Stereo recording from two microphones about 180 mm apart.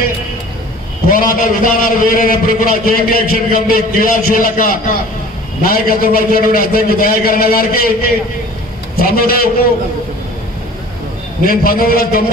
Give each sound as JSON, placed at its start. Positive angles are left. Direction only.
{"t": 1.1, "sound": "a man's voice", "side_deg": 50}
{"t": 9.0, "sound": "a man's voice", "side_deg": 55}
{"t": 11.4, "sound": "a man's voice", "side_deg": 55}